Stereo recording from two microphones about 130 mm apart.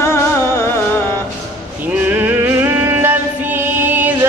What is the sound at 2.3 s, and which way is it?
Music, 15° right (ahead or behind).